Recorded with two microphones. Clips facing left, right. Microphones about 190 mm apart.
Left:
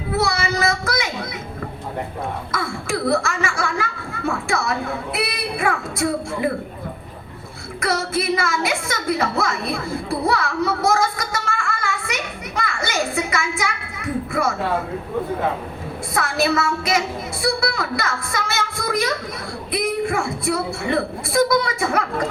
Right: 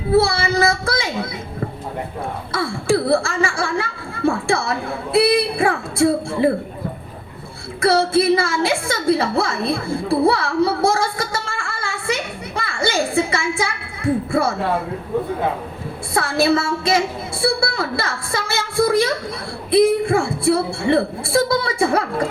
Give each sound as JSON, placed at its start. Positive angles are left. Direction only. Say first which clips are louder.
{"t": 0.1, "sound": "speech", "louder": "right 5 dB", "side_deg": -30}
{"t": 2.5, "sound": "speech", "louder": "right 10 dB", "side_deg": -30}
{"t": 7.8, "sound": "music", "louder": "right 7 dB", "side_deg": -30}
{"t": 16.1, "sound": "speech", "louder": "right 3 dB", "side_deg": -30}